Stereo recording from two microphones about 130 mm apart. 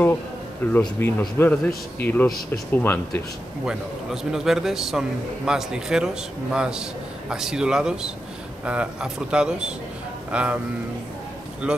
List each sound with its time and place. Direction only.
0.7 s a man's voice: 15° left (ahead or behind)
3.6 s a man's voice: 5° right (ahead or behind)
11.6 s a man's voice: 10° right (ahead or behind)